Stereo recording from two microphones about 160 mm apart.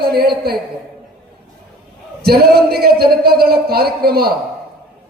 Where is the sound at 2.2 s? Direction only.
75° right (ahead or behind).